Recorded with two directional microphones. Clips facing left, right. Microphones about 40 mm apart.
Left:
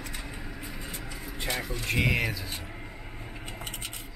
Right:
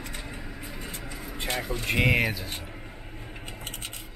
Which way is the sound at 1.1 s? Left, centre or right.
Centre.